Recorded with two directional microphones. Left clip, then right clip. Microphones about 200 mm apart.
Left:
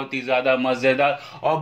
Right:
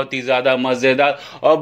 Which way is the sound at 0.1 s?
45° right (ahead or behind).